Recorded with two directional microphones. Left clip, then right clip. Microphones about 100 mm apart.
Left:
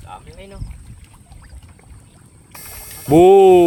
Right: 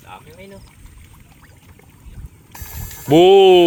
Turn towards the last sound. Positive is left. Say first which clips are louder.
# even
turn(degrees=45)  # may be behind; listen again after turning